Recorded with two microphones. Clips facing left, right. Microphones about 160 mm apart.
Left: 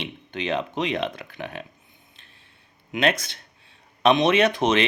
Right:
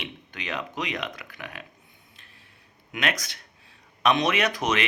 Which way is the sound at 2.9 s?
25° left (ahead or behind).